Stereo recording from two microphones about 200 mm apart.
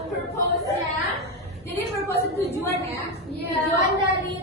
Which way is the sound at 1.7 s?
10° left (ahead or behind).